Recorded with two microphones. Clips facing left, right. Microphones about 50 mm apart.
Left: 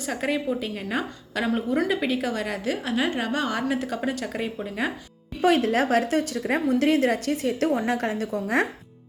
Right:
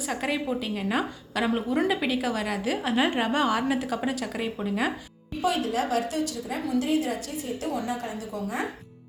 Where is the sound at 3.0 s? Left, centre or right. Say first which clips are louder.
Right 3 dB; centre.